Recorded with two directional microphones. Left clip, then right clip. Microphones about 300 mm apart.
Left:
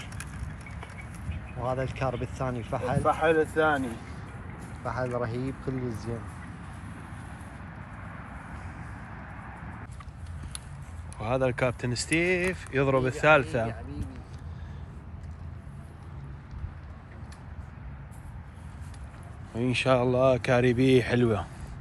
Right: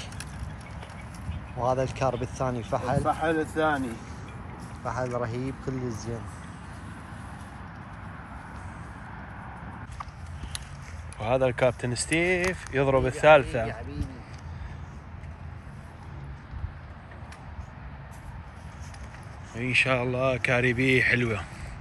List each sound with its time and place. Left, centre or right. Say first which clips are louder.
1.6 s speech: right 5 dB; centre
4.8 s speech: right 1 dB; centre
11.1 s speech: right 3 dB; centre
19.5 s speech: right 1 dB; centre